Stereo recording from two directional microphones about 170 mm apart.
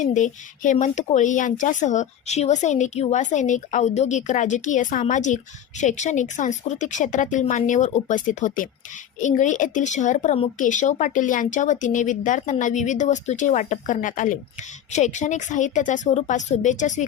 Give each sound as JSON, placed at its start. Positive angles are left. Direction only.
{"t": 0.0, "sound": "speech", "side_deg": 45}